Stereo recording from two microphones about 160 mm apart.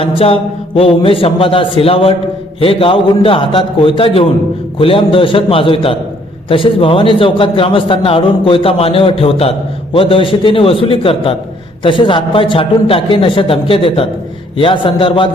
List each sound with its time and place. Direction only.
0.0 s a man's voice: 35° left (ahead or behind)